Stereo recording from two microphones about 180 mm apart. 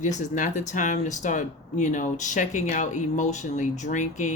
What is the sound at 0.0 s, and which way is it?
Speech, 40° left (ahead or behind).